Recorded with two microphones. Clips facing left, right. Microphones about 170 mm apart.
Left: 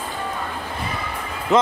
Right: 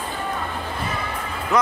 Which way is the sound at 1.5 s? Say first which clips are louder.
Left 3 dB; 20° left (ahead or behind).